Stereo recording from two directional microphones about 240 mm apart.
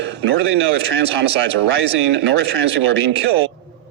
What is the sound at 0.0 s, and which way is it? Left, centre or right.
Speech, right.